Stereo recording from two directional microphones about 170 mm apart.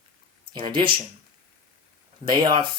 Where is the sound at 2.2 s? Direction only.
25° right (ahead or behind).